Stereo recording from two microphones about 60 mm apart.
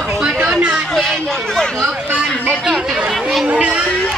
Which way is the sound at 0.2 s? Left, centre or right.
Centre.